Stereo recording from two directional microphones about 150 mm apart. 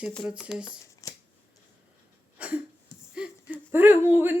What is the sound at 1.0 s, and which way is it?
Scissors, 20° left (ahead or behind).